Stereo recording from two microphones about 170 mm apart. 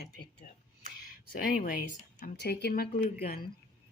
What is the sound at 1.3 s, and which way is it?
Speech, 60° left (ahead or behind).